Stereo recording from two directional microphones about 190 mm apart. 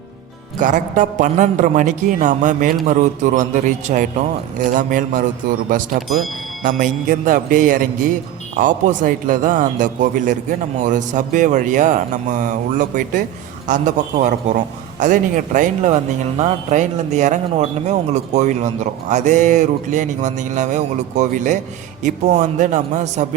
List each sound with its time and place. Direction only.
0.6 s a man's voice: 40° right (ahead or behind)